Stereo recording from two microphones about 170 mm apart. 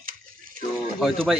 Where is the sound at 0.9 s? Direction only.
5° right (ahead or behind).